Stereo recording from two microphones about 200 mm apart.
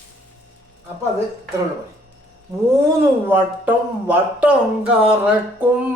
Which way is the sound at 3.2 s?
10° right (ahead or behind).